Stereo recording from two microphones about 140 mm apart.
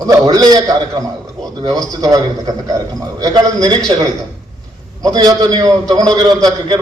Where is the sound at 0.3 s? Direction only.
30° right (ahead or behind).